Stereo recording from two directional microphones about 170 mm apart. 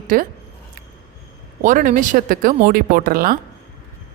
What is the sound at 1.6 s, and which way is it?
A woman's voice, 50° right (ahead or behind).